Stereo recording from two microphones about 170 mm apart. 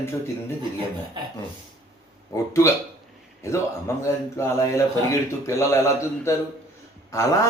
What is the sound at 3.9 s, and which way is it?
Speech, 15° left (ahead or behind).